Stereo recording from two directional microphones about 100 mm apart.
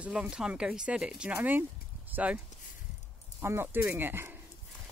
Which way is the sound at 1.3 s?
20° right (ahead or behind).